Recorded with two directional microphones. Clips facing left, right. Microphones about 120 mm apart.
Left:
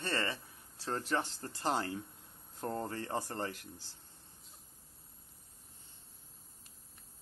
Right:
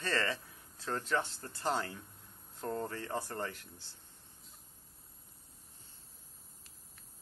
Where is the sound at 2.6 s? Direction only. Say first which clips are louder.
Even; 25° left (ahead or behind).